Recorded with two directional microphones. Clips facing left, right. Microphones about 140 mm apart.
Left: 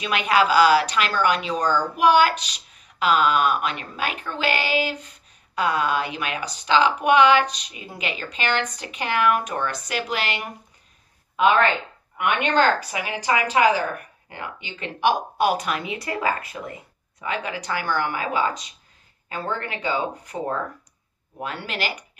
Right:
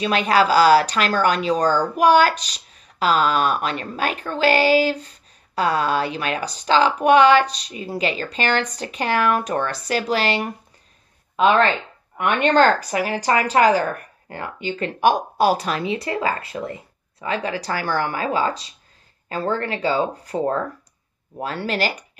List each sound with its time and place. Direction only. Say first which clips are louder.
0.0 s speech: right 3 dB; 35° right (ahead or behind)
12.2 s speech: right 4 dB; 40° right (ahead or behind)